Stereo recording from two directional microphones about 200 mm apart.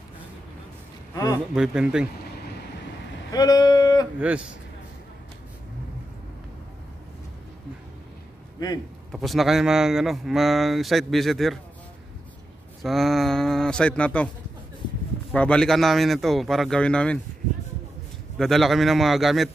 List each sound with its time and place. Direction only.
1.1 s a man's voice: 20° left (ahead or behind)
1.5 s a man's voice: 5° right (ahead or behind)
3.3 s speech: 20° left (ahead or behind)
9.1 s a man's voice: centre (ahead or behind)
12.8 s a man's voice: centre (ahead or behind)
15.3 s a man's voice: 5° left (ahead or behind)
18.4 s a man's voice: centre (ahead or behind)